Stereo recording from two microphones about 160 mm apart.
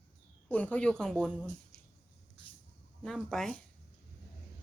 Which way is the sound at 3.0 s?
Centre (ahead or behind).